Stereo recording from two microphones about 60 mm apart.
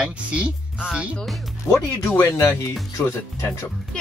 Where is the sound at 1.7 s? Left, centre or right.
Left.